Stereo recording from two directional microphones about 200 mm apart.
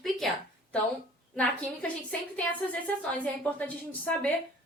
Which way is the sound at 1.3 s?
5° left (ahead or behind).